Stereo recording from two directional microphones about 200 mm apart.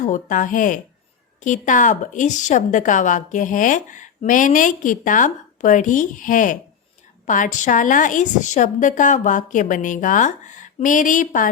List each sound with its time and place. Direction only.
0.0 s a woman's voice: 40° left (ahead or behind)